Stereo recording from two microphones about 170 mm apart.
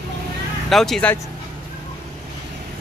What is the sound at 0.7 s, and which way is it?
Speech, centre (ahead or behind).